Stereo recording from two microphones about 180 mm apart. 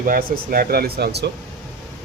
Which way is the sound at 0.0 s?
50° right (ahead or behind).